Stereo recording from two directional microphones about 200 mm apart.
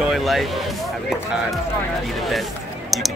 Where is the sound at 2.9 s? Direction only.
Centre (ahead or behind).